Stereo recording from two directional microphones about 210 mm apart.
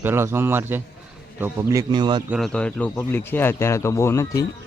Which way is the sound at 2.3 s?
Centre (ahead or behind).